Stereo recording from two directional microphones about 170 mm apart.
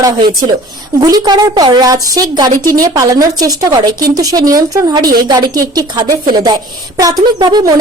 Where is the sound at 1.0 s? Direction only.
25° right (ahead or behind).